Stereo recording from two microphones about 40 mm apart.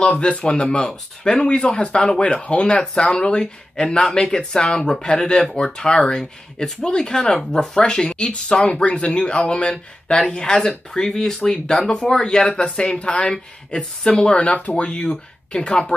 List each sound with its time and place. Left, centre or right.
0.0 s speech: left
11.9 s speech: left